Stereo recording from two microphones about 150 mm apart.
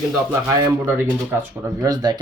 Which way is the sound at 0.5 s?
20° right (ahead or behind).